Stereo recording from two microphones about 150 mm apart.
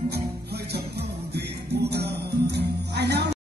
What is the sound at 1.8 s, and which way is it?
Music, 90° right.